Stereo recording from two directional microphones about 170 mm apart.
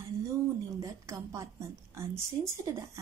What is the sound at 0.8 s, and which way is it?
Speech, 20° right (ahead or behind).